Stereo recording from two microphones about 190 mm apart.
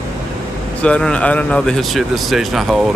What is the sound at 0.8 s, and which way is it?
Speech, 5° left (ahead or behind).